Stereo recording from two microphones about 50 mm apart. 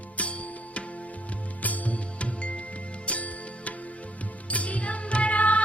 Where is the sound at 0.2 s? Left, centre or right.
Left.